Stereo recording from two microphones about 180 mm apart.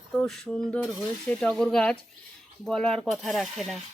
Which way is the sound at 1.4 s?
5° left (ahead or behind).